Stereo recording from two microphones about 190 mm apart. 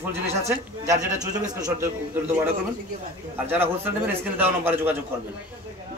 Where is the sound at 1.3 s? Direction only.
20° right (ahead or behind).